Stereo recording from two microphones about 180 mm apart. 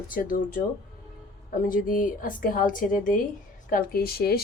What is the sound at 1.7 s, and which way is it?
A woman's voice, 50° left (ahead or behind).